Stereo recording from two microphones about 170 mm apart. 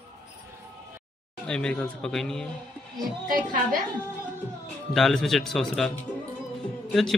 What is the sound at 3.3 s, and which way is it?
Speech, 55° right (ahead or behind).